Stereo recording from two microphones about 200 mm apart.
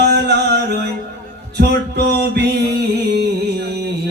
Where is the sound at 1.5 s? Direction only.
55° right (ahead or behind).